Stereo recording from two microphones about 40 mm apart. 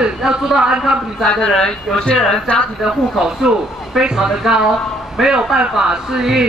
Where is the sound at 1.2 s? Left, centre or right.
Centre.